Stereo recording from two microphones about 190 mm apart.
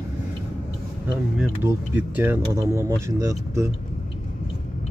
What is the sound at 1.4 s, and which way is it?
Speech, 10° right (ahead or behind).